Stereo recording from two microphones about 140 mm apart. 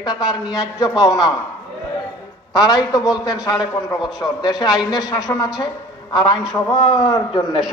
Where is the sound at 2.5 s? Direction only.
30° left (ahead or behind).